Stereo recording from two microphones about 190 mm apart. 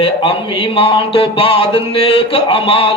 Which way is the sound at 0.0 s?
30° left (ahead or behind).